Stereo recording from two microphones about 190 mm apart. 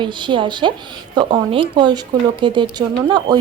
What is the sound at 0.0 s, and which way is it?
Speech, 25° right (ahead or behind).